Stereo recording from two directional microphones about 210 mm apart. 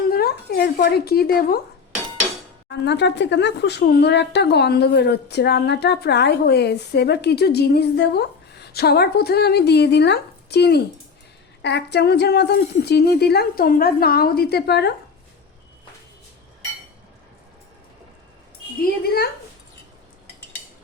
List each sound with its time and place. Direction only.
0.1 s speech: 45° left (ahead or behind)
2.6 s speech: 55° left (ahead or behind)
19.0 s speech: 45° left (ahead or behind)